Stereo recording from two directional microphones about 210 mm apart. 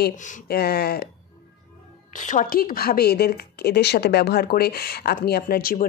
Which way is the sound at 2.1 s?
35° left (ahead or behind).